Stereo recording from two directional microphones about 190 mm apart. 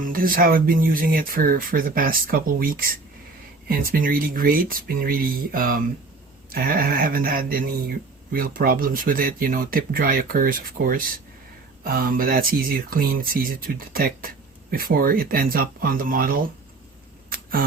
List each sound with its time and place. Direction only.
0.0 s speech: 50° right (ahead or behind)
17.2 s camera: 50° right (ahead or behind)